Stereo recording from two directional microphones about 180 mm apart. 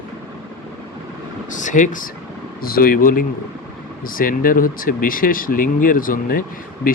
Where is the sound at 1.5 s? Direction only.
45° left (ahead or behind).